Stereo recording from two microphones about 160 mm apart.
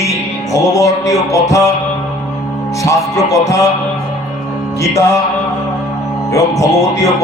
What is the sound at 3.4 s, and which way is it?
Speech, 20° left (ahead or behind).